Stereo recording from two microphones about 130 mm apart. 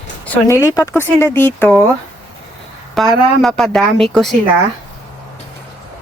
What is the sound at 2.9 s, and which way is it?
A woman's voice, 5° left (ahead or behind).